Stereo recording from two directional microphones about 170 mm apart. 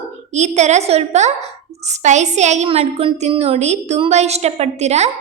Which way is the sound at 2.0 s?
45° right (ahead or behind).